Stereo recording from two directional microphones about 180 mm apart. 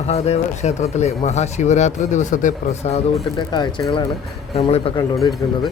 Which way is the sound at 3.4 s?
25° left (ahead or behind).